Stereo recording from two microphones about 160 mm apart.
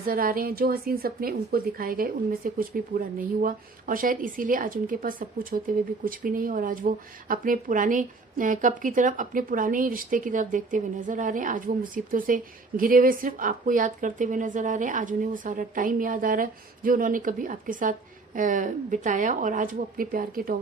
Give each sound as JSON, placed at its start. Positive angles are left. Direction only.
{"t": 0.1, "sound": "a woman's voice", "side_deg": -65}